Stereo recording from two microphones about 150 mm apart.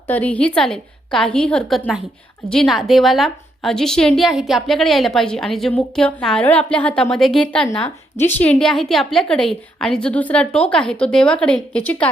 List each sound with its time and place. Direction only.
0.1 s a woman's voice: 10° left (ahead or behind)